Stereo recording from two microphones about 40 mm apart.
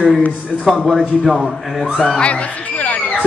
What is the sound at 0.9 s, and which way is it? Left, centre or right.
Speech, centre.